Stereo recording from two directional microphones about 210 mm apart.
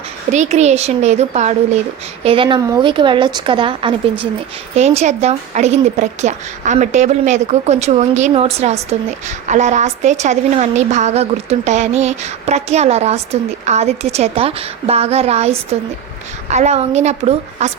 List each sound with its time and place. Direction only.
0.3 s a woman's voice: 35° right (ahead or behind)